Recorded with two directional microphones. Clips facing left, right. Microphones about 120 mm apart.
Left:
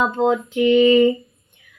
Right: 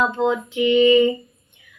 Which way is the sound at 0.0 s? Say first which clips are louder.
Left 2 dB; 40° left (ahead or behind).